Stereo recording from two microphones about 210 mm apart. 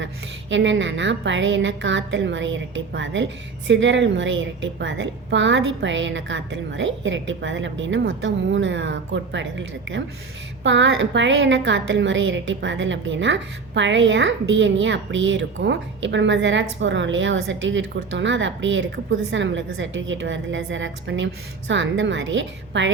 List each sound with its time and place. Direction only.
0.5 s a woman's voice: 60° right (ahead or behind)